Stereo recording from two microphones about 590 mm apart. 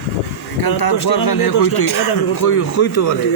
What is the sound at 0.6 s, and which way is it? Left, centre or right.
Speech, left.